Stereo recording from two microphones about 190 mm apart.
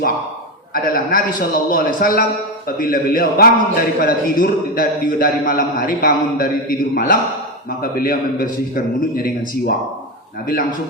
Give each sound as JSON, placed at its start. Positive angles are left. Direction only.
{"t": 0.7, "sound": "a man's voice", "side_deg": 50}